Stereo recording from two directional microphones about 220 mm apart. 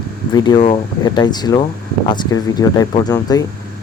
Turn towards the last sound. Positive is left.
turn(degrees=15)  # may be behind; listen again after turning